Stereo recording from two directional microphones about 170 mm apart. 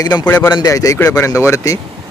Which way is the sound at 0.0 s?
25° left (ahead or behind).